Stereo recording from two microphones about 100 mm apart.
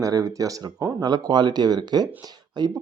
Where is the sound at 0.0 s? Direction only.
35° right (ahead or behind).